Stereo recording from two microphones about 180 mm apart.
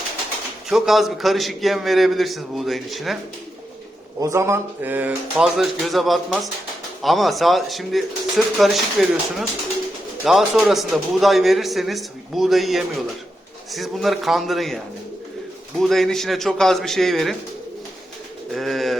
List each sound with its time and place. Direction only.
0.7 s a man's voice: centre (ahead or behind)
4.2 s a man's voice: 15° right (ahead or behind); by 14.8 s centre (ahead or behind)
15.8 s a man's voice: centre (ahead or behind)
18.5 s a man's voice: centre (ahead or behind)